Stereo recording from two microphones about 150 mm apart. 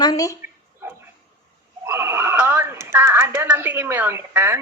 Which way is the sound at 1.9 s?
15° right (ahead or behind).